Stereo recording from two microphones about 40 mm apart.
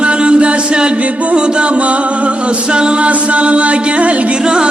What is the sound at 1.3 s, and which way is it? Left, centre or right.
Music, right.